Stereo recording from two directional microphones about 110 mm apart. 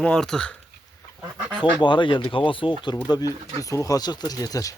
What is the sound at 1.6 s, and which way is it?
Speech, 45° left (ahead or behind).